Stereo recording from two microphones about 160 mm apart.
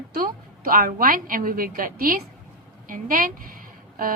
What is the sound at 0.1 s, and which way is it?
A woman's voice, 65° right (ahead or behind).